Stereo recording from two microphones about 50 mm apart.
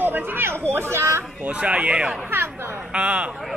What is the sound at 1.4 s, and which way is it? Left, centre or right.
A man's voice, right.